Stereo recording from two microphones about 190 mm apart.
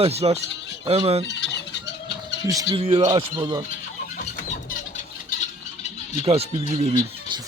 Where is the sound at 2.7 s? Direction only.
25° right (ahead or behind).